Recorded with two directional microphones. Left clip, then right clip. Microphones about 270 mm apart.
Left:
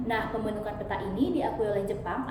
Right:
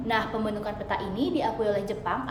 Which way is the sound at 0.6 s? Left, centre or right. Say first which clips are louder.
Right 2 dB; centre.